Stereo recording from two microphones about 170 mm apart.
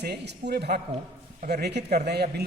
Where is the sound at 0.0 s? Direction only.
75° right (ahead or behind).